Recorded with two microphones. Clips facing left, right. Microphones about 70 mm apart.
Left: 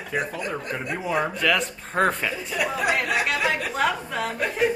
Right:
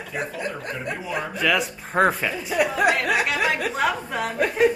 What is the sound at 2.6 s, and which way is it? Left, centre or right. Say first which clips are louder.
Speech: right 4 dB; right.